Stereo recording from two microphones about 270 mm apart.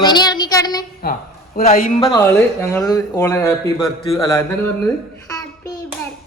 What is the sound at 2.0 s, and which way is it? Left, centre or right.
A man's voice, centre.